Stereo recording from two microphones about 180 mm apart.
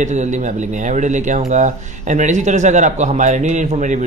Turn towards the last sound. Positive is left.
turn(degrees=-45)  # may be behind; listen again after turning